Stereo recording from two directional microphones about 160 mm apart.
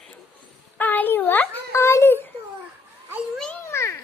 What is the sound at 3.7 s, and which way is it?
Children playing, 15° left (ahead or behind).